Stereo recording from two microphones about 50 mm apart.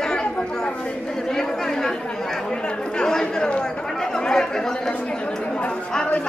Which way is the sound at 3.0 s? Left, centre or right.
Centre.